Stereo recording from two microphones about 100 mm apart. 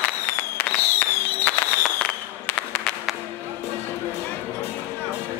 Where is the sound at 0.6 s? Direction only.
20° left (ahead or behind).